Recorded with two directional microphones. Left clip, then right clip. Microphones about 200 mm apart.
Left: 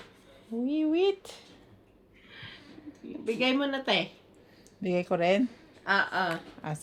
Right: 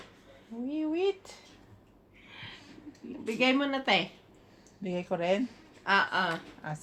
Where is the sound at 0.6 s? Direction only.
55° left (ahead or behind).